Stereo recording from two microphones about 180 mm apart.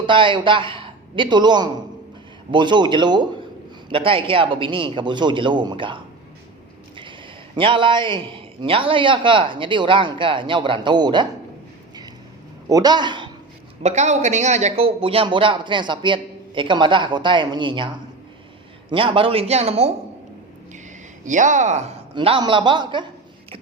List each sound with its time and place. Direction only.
0.0 s a man's voice: 25° right (ahead or behind)
7.5 s speech: 25° right (ahead or behind)
12.6 s a man's voice: 20° right (ahead or behind)
13.8 s a man's voice: 40° right (ahead or behind)
21.2 s speech: 45° right (ahead or behind)
22.1 s speech: 30° right (ahead or behind)